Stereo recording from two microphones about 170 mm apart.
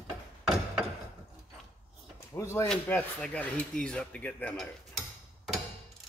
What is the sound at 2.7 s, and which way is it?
Speech, 5° left (ahead or behind).